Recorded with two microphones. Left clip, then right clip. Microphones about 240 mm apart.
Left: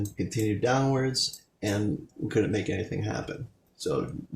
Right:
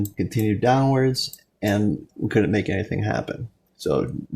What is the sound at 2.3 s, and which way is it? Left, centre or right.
Speech, right.